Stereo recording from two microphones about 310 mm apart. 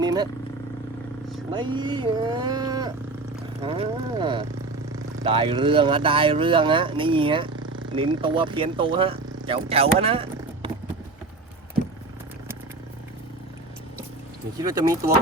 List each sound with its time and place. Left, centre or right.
0.0 s vehicle: centre
1.5 s speech: centre
14.6 s speech: centre